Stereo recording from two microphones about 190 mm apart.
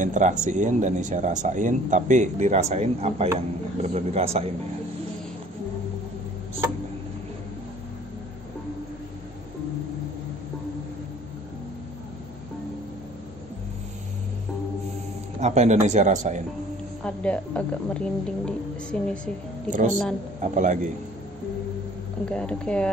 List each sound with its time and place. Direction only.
0.0 s speech: 40° right (ahead or behind)
15.4 s speech: 35° right (ahead or behind)
17.0 s a woman's voice: 5° left (ahead or behind)
20.5 s speech: 40° right (ahead or behind)
22.2 s a woman's voice: 5° left (ahead or behind)